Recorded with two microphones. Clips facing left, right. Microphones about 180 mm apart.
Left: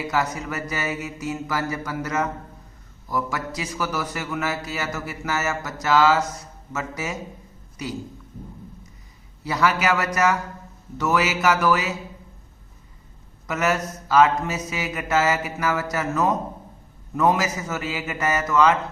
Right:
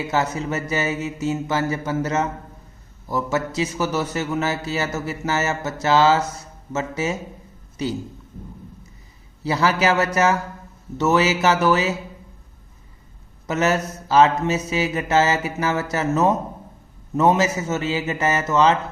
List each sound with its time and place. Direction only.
0.0 s speech: 25° right (ahead or behind)
9.4 s speech: 30° right (ahead or behind)
13.5 s speech: 25° right (ahead or behind)